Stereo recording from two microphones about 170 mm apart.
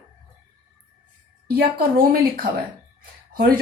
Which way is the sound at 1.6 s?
60° right (ahead or behind).